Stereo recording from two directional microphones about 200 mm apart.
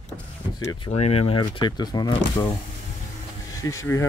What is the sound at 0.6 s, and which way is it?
Speech, 20° left (ahead or behind).